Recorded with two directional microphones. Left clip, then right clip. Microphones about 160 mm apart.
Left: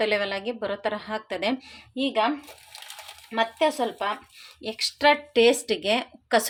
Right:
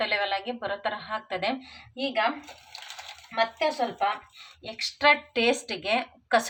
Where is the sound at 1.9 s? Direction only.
90° left.